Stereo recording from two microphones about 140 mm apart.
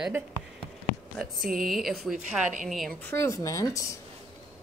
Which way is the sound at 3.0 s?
20° left (ahead or behind).